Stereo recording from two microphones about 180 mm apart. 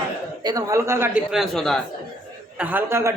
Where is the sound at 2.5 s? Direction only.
10° right (ahead or behind).